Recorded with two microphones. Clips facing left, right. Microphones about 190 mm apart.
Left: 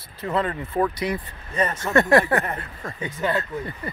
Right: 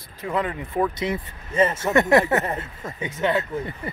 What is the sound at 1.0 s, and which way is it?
Speech, 25° right (ahead or behind).